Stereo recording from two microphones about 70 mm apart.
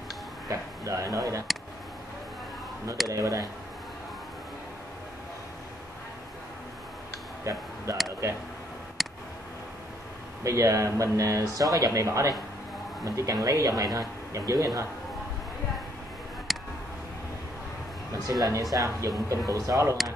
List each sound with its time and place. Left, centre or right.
0.5 s speech: right
3.1 s speech: right
7.4 s speech: right
9.0 s tick: centre
10.4 s speech: right
13.4 s speech: right
14.3 s speech: right
16.5 s a sound: centre
18.2 s speech: right